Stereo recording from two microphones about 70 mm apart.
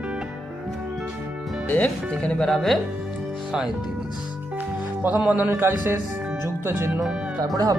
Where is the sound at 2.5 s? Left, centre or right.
Centre.